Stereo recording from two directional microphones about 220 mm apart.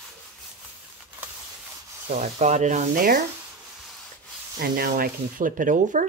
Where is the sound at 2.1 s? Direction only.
30° right (ahead or behind).